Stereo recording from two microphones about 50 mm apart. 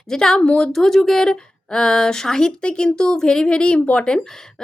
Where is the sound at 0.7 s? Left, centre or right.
Centre.